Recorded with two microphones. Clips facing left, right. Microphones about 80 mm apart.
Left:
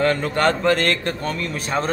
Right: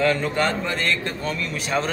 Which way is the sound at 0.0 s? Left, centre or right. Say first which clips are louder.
Left 2 dB; left.